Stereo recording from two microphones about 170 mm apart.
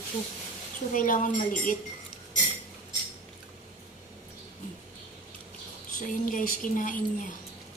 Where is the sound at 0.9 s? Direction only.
50° left (ahead or behind).